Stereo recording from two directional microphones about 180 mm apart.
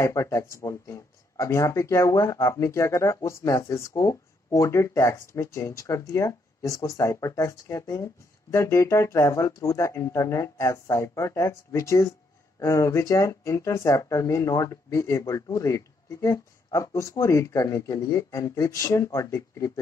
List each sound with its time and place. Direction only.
0.0 s speech: 15° left (ahead or behind)